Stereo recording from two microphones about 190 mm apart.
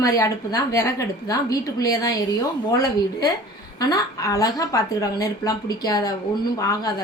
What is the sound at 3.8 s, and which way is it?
A woman's voice, 20° left (ahead or behind).